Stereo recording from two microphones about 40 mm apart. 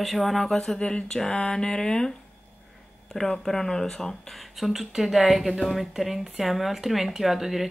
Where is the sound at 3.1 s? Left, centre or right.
Centre.